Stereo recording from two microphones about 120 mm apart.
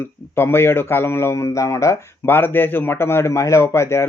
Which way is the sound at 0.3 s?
20° left (ahead or behind).